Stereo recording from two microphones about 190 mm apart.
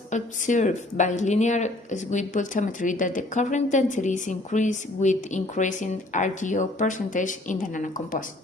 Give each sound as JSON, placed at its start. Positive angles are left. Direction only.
{"t": 0.1, "sound": "speech", "side_deg": 40}